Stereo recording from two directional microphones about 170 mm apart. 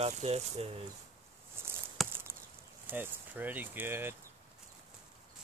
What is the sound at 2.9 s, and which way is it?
Speech, 10° right (ahead or behind).